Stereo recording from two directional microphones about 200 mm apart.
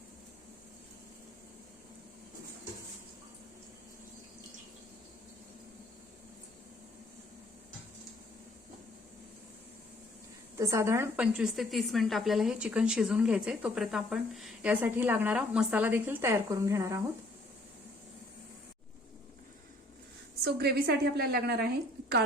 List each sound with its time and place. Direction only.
10.6 s a woman's voice: 15° right (ahead or behind)
20.4 s a woman's voice: 55° right (ahead or behind)